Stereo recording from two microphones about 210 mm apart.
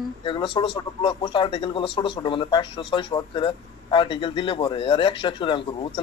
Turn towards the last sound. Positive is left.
turn(degrees=25)  # may be behind; listen again after turning